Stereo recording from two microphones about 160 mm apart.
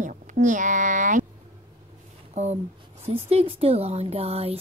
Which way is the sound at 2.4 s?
45° right (ahead or behind).